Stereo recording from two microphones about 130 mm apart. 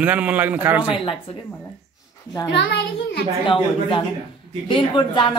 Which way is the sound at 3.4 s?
40° left (ahead or behind).